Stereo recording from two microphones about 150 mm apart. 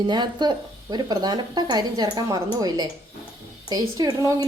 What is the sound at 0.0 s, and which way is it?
A woman's voice, 30° right (ahead or behind).